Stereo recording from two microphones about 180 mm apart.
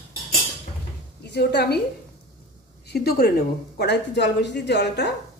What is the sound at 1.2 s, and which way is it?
Speech, 65° left (ahead or behind).